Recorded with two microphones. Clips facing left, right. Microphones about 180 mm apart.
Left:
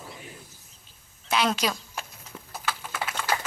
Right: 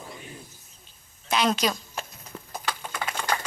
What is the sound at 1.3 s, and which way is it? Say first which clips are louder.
Speech: right 1 dB; 5° left (ahead or behind).